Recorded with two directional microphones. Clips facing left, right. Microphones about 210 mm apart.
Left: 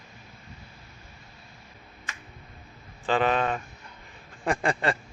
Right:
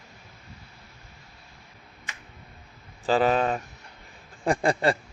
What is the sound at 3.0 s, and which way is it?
Speech, 35° right (ahead or behind).